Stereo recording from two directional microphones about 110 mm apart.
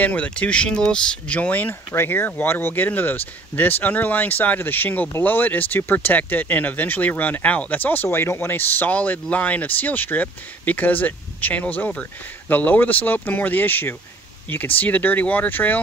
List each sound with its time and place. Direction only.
0.0 s speech: 10° left (ahead or behind)